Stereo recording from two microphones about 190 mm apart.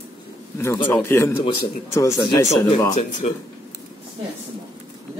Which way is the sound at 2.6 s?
30° left (ahead or behind).